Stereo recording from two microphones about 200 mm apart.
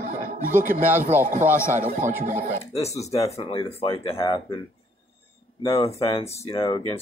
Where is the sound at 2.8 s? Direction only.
15° left (ahead or behind).